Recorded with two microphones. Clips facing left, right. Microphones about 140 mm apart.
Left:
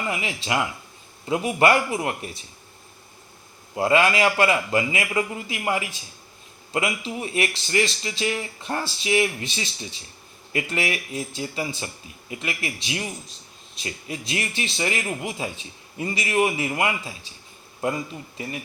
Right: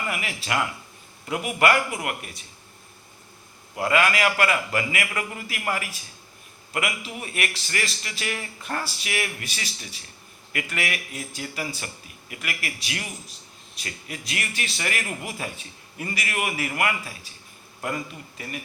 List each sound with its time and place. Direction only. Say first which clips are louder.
0.1 s speech: left 3 dB; 20° left (ahead or behind)
3.8 s speech: left 3 dB; 25° left (ahead or behind)